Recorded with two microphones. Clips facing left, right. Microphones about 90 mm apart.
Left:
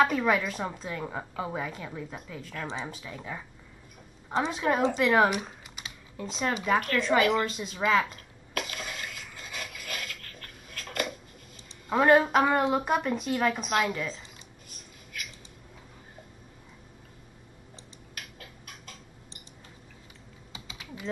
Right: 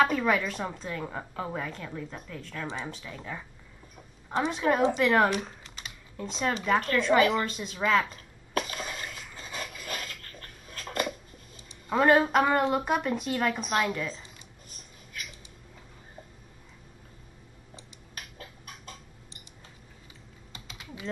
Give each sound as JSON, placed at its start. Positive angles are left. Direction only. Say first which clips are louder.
{"t": 0.0, "sound": "a woman's voice", "louder": "even", "side_deg": 0}
{"t": 7.2, "sound": "a woman's voice", "louder": "even", "side_deg": -30}
{"t": 7.4, "sound": "a woman's voice", "louder": "left 1 dB", "side_deg": 0}
{"t": 8.5, "sound": "a sound", "louder": "right 3 dB", "side_deg": -30}
{"t": 11.9, "sound": "a woman's voice", "louder": "left 1 dB", "side_deg": 0}
{"t": 18.1, "sound": "a sound", "louder": "right 1 dB", "side_deg": -30}
{"t": 20.5, "sound": "typing", "louder": "left 1 dB", "side_deg": 5}